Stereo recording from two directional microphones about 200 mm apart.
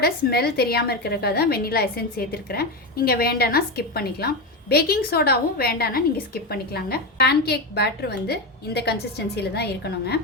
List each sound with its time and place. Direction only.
0.0 s a woman's voice: 50° left (ahead or behind)